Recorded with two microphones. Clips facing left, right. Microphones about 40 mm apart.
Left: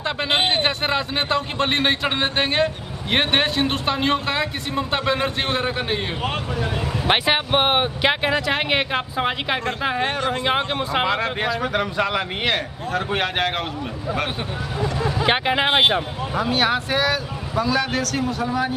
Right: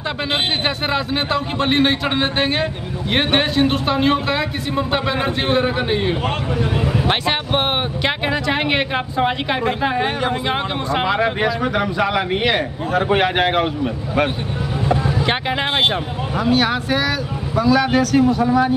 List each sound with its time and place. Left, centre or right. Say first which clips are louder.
0.3 s speech: left 1 dB; centre
7.1 s speech: left 5 dB; centre
11.1 s a man's voice: right 4 dB; centre
15.1 s speech: even; centre